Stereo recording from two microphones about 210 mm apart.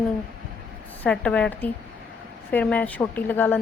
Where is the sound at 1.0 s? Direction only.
5° left (ahead or behind).